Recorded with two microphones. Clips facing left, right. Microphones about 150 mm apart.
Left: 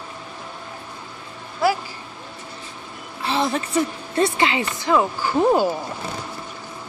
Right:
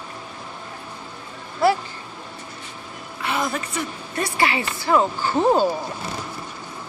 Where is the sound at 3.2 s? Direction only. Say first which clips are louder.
Left 3 dB; 30° left (ahead or behind).